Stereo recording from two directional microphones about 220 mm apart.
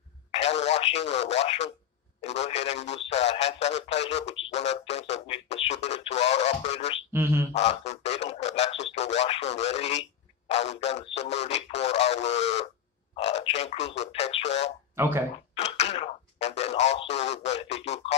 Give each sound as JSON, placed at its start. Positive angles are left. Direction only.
{"t": 0.3, "sound": "radio", "side_deg": 30}
{"t": 2.2, "sound": "speech", "side_deg": 30}
{"t": 7.1, "sound": "a sound", "side_deg": -10}
{"t": 7.5, "sound": "speech", "side_deg": 30}
{"t": 15.0, "sound": "speech", "side_deg": -10}
{"t": 15.5, "sound": "speech", "side_deg": 30}